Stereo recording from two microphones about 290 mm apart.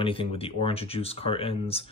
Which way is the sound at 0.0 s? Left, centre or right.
Centre.